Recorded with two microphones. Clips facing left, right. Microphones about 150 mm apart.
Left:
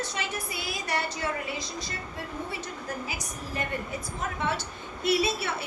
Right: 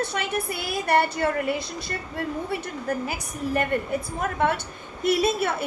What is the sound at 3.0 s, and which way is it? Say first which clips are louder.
A woman's voice: right 8 dB; 55° right (ahead or behind).